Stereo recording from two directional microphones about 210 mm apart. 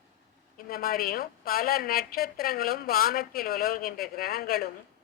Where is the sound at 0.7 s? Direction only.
45° left (ahead or behind).